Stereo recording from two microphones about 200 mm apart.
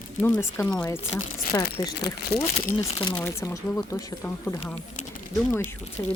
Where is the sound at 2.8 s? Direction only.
20° left (ahead or behind).